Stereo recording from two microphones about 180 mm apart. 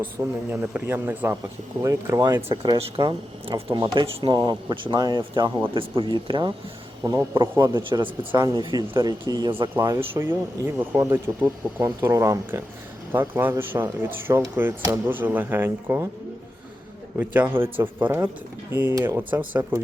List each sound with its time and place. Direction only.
0.2 s speech: 15° right (ahead or behind)
17.2 s speech: 10° right (ahead or behind)